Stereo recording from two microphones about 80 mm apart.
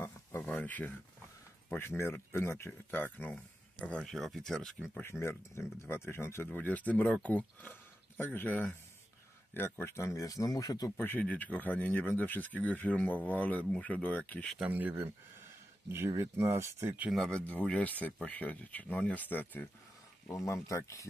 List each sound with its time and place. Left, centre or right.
0.0 s a sound: left
0.5 s speech: centre
4.0 s speech: centre
5.1 s speech: centre
5.5 s speech: left
6.5 s speech: centre; by 10.9 s left
11.0 s speech: left
14.7 s speech: right
16.2 s speech: right
17.3 s speech: centre
20.2 s speech: left